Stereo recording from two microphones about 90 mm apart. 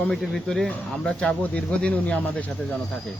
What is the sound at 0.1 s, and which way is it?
Speech, 5° left (ahead or behind).